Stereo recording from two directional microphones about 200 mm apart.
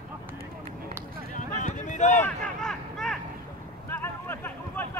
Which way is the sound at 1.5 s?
40° left (ahead or behind).